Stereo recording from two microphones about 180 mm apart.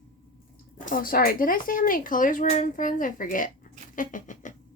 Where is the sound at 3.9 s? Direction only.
45° left (ahead or behind).